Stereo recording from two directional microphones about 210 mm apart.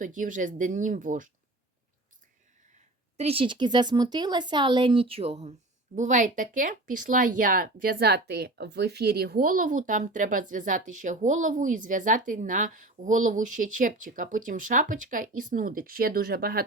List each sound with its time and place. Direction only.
0.0 s a woman's voice: 40° right (ahead or behind)
2.7 s a woman's voice: 30° right (ahead or behind); by 16.6 s 45° right (ahead or behind)